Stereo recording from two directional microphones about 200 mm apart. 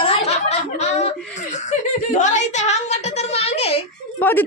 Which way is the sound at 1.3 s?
35° left (ahead or behind).